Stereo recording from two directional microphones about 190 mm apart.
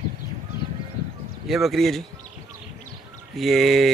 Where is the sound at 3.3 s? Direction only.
Centre (ahead or behind).